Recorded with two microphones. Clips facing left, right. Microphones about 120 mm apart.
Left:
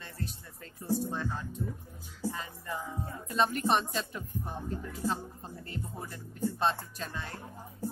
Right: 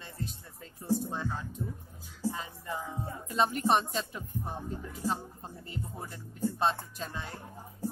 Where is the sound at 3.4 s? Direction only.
20° right (ahead or behind).